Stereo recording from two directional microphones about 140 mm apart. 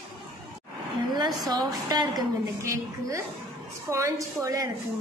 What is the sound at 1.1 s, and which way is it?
A woman's voice, 30° right (ahead or behind).